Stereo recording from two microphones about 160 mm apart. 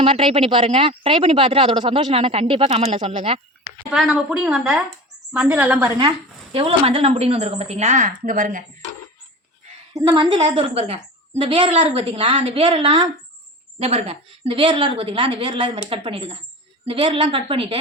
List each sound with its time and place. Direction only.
0.0 s speech: 35° right (ahead or behind)
3.6 s a woman's voice: 5° right (ahead or behind)
6.0 s speech: 30° right (ahead or behind); by 8.6 s 55° right (ahead or behind)
10.0 s speech: 25° right (ahead or behind)